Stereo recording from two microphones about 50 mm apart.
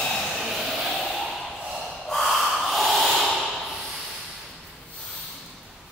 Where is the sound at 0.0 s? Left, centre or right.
Centre.